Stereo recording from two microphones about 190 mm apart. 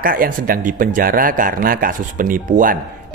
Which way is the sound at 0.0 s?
50° right (ahead or behind).